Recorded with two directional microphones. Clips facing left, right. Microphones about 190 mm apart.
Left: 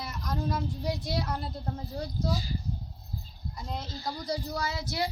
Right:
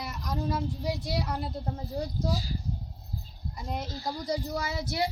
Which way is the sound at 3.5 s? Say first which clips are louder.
Right 3 dB; 15° right (ahead or behind).